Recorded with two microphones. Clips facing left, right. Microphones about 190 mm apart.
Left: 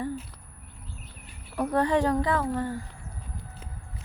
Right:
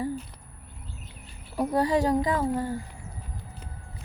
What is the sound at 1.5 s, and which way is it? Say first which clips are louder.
Speech: even; 10° right (ahead or behind).